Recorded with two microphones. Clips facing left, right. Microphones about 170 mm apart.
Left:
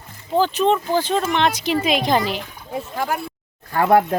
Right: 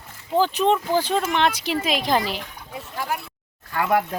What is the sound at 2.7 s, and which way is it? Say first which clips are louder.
Speech: left 5 dB; 50° left (ahead or behind).